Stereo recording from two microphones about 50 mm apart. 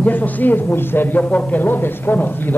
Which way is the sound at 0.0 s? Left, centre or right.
Left.